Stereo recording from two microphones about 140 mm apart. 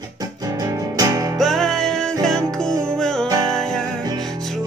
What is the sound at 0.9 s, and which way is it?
Music, 25° right (ahead or behind).